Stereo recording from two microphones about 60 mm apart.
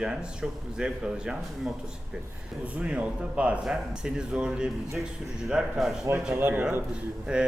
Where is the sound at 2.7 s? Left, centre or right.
Centre.